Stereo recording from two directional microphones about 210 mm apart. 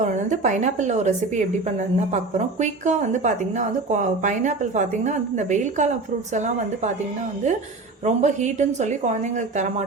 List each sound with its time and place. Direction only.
0.0 s speech: 35° right (ahead or behind)
8.0 s speech: 35° right (ahead or behind)